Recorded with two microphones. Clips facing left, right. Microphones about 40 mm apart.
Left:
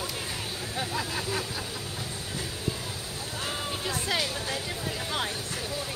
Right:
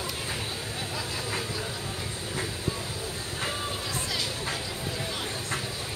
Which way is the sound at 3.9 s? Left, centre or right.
Left.